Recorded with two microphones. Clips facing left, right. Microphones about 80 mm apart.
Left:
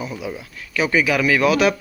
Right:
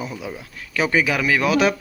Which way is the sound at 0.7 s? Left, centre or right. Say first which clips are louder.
Left 1 dB; right.